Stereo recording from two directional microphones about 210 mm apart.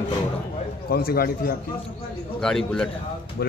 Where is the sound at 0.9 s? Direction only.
45° left (ahead or behind).